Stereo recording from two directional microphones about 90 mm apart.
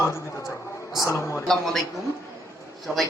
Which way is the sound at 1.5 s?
5° left (ahead or behind).